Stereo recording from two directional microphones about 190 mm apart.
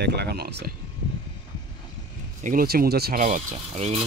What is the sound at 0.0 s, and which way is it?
Speech, 60° right (ahead or behind).